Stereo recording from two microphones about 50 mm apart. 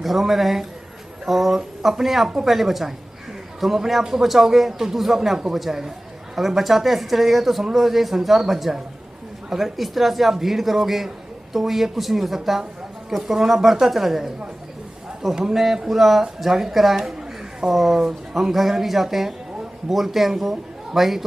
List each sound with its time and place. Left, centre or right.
0.0 s speech: centre
15.5 s speech: centre